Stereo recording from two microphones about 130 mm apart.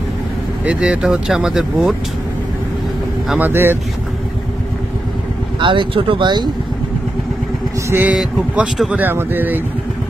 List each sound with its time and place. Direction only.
0.7 s speech: 5° right (ahead or behind)
3.3 s speech: 15° right (ahead or behind)
5.6 s speech: 40° right (ahead or behind)
7.9 s speech: 10° right (ahead or behind)